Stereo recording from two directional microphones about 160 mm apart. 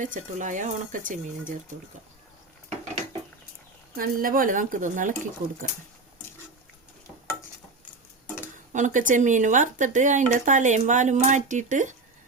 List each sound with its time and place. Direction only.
0.0 s speech: 50° right (ahead or behind)
3.9 s speech: 60° right (ahead or behind)
8.5 s speech: 50° right (ahead or behind)